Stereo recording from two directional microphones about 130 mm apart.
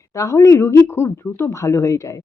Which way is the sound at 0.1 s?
25° left (ahead or behind).